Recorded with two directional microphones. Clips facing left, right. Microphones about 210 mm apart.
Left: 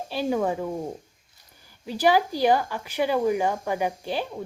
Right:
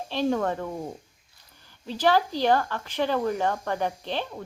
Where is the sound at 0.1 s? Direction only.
10° left (ahead or behind).